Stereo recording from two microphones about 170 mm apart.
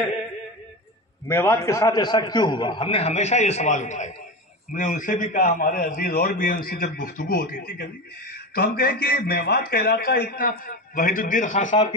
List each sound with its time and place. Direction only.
1.2 s a man's voice: 15° left (ahead or behind); by 11.7 s 50° left (ahead or behind)